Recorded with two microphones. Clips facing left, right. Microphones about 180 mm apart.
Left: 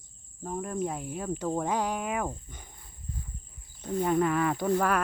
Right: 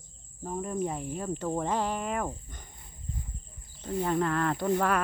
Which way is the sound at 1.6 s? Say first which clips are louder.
Even; 10° left (ahead or behind).